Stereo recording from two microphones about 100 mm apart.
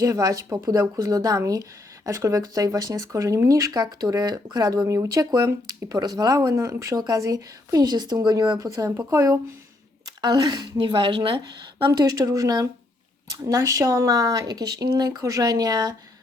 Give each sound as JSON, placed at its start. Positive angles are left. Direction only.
{"t": 0.0, "sound": "speech", "side_deg": -35}
{"t": 6.0, "sound": "speech", "side_deg": -40}
{"t": 10.2, "sound": "a woman's voice", "side_deg": -45}
{"t": 10.8, "sound": "a woman's voice", "side_deg": -60}